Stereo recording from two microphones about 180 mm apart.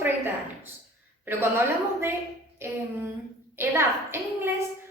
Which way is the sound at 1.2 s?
15° right (ahead or behind).